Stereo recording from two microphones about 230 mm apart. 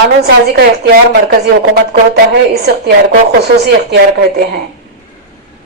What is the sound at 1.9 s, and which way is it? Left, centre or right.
A woman's voice, right.